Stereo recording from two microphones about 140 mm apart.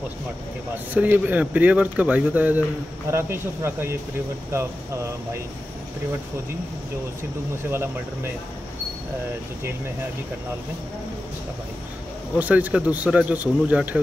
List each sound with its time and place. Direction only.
0.9 s speech: 10° right (ahead or behind)
7.7 s speech: 15° right (ahead or behind)
12.4 s speech: 10° right (ahead or behind)